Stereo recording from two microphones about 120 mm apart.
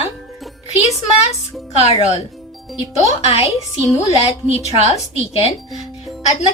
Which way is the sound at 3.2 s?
55° left (ahead or behind).